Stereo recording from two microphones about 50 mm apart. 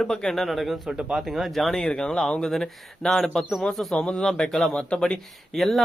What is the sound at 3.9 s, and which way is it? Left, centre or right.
A man's voice, left.